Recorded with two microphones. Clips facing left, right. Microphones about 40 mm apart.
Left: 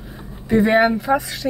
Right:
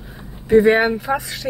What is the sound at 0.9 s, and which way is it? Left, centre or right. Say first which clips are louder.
Speech: left 3 dB; centre.